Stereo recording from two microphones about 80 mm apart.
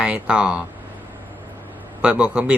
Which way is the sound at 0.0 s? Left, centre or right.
Centre.